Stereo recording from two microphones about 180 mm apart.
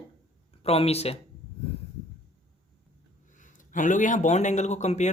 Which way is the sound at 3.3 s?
45° left (ahead or behind).